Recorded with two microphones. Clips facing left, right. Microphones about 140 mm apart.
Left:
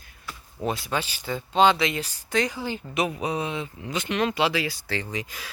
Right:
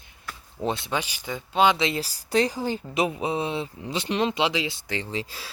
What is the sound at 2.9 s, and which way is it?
Speech, 25° right (ahead or behind).